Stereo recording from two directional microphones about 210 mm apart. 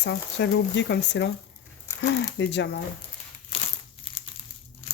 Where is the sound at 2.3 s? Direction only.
55° left (ahead or behind).